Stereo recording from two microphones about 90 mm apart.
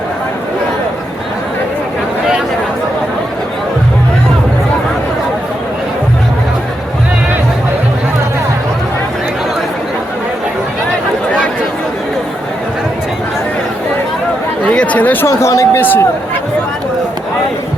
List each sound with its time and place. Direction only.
14.6 s chatter: 15° left (ahead or behind)
15.3 s speech: 35° left (ahead or behind)
15.8 s speech: 20° left (ahead or behind)